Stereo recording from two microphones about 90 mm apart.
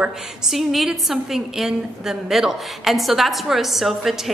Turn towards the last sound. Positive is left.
turn(degrees=0)  # may be behind; listen again after turning